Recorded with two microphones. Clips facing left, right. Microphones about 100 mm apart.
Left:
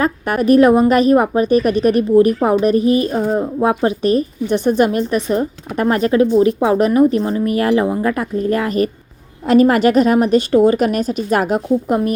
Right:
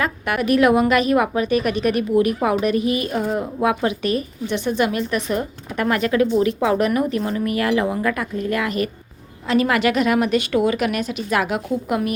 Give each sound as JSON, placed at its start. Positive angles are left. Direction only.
{"t": 0.0, "sound": "a woman's voice", "side_deg": 35}